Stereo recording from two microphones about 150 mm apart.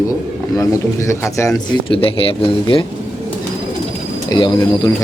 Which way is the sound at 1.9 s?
40° left (ahead or behind).